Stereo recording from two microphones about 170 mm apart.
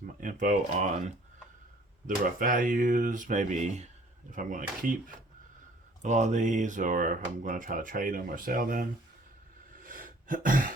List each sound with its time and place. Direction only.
0.2 s speech: 50° right (ahead or behind)
2.0 s speech: 55° right (ahead or behind)
9.7 s a sound: 55° right (ahead or behind)